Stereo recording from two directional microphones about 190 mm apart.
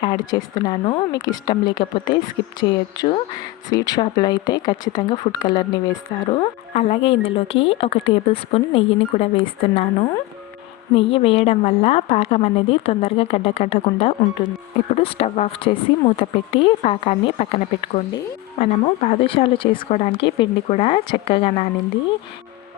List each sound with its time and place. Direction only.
0.0 s a woman's voice: 25° left (ahead or behind)